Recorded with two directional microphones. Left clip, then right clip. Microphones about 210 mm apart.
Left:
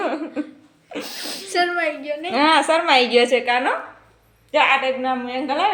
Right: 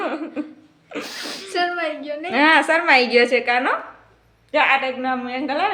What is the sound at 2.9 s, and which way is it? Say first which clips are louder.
Speech: right 1 dB; 40° right (ahead or behind).